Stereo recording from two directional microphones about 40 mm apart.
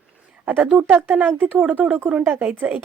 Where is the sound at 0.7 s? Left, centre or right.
Right.